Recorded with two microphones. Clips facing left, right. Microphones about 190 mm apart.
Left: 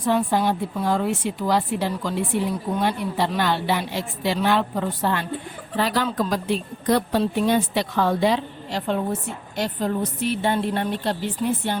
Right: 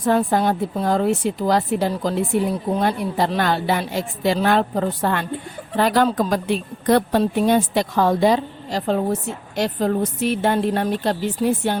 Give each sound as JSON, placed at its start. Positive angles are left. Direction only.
{"t": 0.1, "sound": "a woman's voice", "side_deg": -45}